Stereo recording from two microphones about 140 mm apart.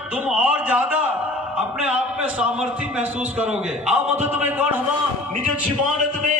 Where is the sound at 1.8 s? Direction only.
10° right (ahead or behind).